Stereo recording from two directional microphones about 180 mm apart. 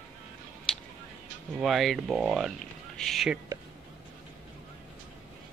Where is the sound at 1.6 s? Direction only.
Centre (ahead or behind).